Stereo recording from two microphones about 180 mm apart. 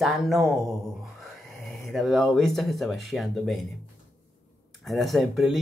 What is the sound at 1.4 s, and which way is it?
Speech, centre (ahead or behind).